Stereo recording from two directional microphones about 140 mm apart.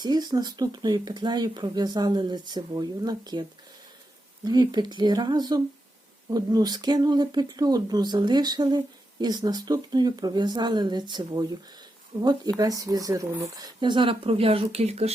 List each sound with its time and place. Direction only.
0.0 s speech: 30° right (ahead or behind)
4.4 s speech: 30° right (ahead or behind)
12.1 s speech: 45° right (ahead or behind)
12.5 s speech: 25° right (ahead or behind); by 15.1 s 50° right (ahead or behind)